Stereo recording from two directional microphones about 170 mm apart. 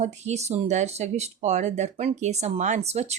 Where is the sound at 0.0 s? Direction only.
40° right (ahead or behind).